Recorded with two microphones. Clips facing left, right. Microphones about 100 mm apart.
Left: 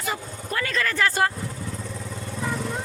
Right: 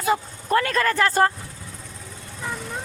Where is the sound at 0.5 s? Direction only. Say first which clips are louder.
Right 6 dB; 50° right (ahead or behind).